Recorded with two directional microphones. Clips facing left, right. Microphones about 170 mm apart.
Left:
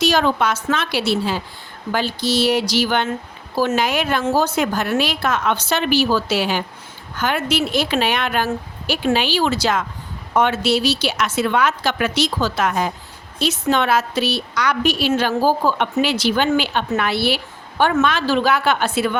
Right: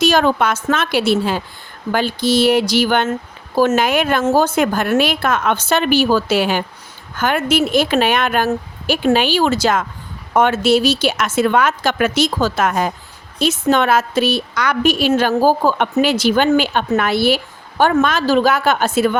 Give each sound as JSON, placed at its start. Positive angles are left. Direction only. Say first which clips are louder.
{"t": 0.0, "sound": "a woman's voice", "louder": "right 3 dB", "side_deg": -50}